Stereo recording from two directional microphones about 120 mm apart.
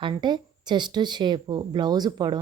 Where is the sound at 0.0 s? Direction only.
40° right (ahead or behind).